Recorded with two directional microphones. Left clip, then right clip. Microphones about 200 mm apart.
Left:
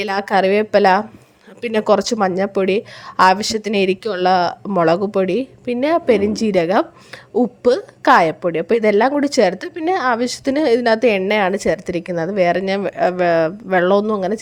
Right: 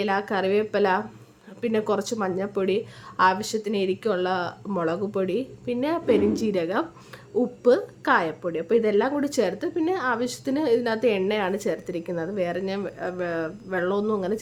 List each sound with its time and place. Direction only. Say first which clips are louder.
0.0 s a woman's voice: left 8 dB; 35° left (ahead or behind)